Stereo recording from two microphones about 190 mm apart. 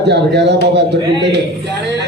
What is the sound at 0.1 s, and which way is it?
Speech, 65° right (ahead or behind).